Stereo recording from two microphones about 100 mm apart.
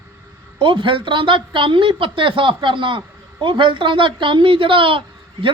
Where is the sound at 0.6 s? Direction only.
55° right (ahead or behind).